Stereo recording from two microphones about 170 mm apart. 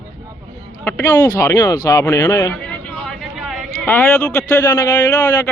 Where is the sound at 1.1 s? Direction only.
20° left (ahead or behind); by 3.9 s centre (ahead or behind).